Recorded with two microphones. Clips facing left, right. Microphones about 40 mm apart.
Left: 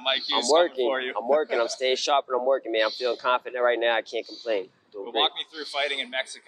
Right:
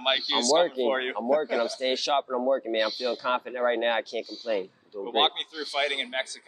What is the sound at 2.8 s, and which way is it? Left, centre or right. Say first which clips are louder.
Speech: left 3 dB; centre.